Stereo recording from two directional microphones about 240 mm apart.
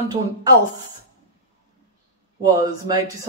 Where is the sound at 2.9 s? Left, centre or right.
Centre.